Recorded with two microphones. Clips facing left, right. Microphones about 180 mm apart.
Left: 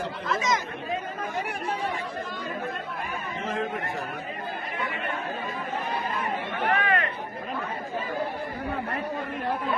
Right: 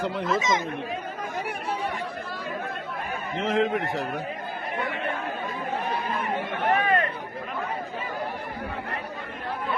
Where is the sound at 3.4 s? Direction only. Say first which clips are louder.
Right 7 dB; 80° right.